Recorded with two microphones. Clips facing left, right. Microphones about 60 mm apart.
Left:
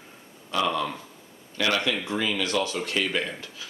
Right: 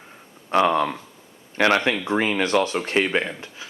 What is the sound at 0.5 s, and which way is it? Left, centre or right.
Speech, right.